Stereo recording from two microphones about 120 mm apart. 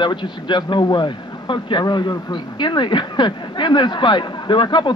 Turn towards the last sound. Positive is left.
turn(degrees=40)  # may be behind; listen again after turning